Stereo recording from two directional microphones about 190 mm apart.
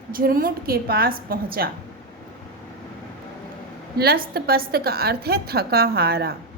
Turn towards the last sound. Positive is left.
turn(degrees=-55)  # may be behind; listen again after turning